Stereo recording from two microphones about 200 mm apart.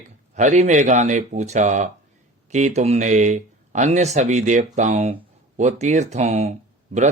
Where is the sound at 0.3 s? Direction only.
35° right (ahead or behind).